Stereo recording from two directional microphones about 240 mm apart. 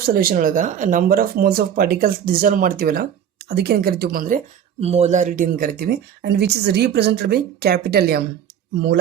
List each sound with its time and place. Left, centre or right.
0.0 s speech: right